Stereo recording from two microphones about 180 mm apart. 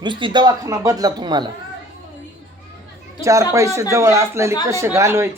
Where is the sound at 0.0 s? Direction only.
25° right (ahead or behind).